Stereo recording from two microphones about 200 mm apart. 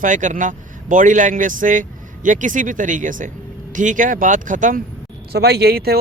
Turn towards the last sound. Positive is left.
turn(degrees=-50)  # may be behind; listen again after turning